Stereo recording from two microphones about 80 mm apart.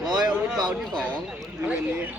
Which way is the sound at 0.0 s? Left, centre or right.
Right.